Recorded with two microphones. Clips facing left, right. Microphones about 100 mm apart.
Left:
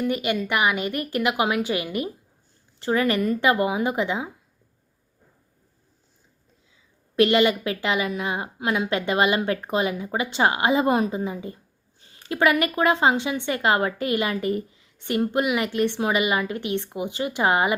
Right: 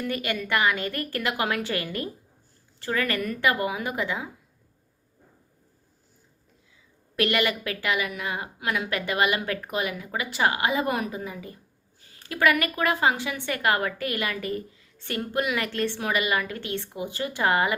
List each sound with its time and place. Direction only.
0.0 s a woman's voice: 20° left (ahead or behind)
7.2 s a woman's voice: 20° left (ahead or behind)